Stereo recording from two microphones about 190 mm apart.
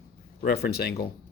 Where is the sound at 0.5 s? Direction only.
55° left (ahead or behind).